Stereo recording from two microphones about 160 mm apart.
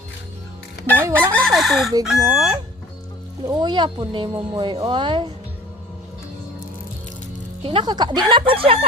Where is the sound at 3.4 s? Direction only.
25° right (ahead or behind).